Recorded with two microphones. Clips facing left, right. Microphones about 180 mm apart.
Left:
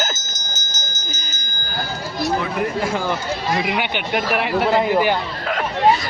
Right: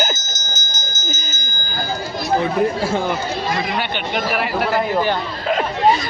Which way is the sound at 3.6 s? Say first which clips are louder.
Even; 10° left (ahead or behind).